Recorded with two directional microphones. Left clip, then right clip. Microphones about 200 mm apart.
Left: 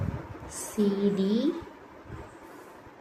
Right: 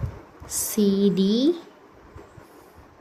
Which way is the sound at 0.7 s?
60° right (ahead or behind).